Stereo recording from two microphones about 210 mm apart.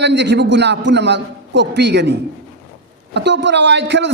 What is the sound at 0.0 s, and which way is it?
A man's voice, 55° right (ahead or behind).